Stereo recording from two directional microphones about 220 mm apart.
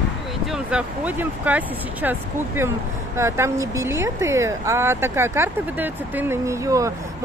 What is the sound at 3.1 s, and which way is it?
Speech, 10° right (ahead or behind).